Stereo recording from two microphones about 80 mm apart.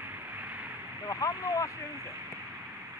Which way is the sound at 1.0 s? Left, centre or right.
Left.